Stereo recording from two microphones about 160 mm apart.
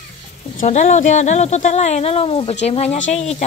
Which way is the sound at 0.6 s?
45° left (ahead or behind).